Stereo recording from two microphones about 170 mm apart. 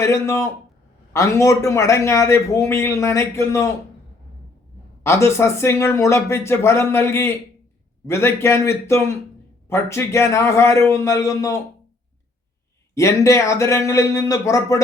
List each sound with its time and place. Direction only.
0.0 s a man's voice: 15° left (ahead or behind)
5.0 s a man's voice: 15° left (ahead or behind)
12.9 s a man's voice: 15° left (ahead or behind)